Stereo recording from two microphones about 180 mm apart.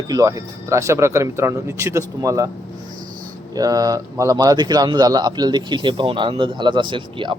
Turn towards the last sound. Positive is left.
turn(degrees=-30)  # may be behind; listen again after turning